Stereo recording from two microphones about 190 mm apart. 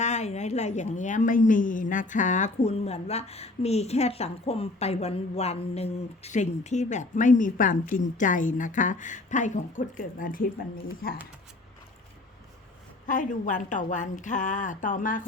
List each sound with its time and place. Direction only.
0.0 s a woman's voice: 35° left (ahead or behind)
13.1 s a woman's voice: 45° left (ahead or behind)